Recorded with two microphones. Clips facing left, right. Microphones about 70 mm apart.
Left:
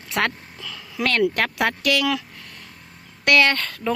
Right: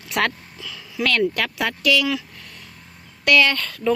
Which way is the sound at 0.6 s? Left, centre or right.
Left.